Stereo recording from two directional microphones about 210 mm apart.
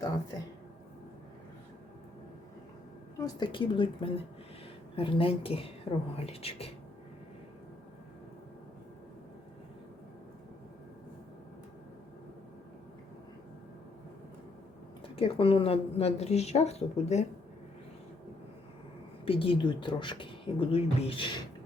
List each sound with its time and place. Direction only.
3.2 s speech: 20° left (ahead or behind)
15.1 s speech: 25° left (ahead or behind)
19.2 s speech: 25° left (ahead or behind)